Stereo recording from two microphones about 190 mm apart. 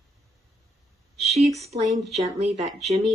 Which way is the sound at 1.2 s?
35° right (ahead or behind).